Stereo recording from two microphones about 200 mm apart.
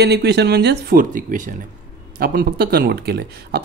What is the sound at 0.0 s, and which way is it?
Speech, 55° right (ahead or behind).